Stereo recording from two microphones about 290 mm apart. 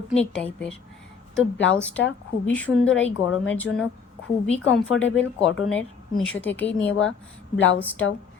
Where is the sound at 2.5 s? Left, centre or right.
Centre.